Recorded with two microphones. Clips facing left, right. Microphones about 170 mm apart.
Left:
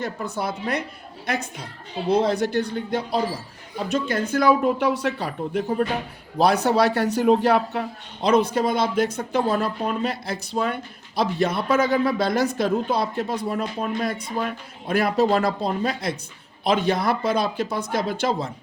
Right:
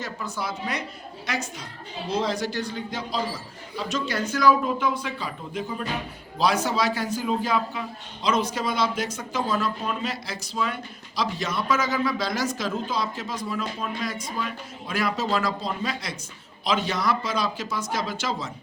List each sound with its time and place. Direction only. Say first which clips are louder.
0.0 s a man's voice: left 4 dB; 60° left (ahead or behind)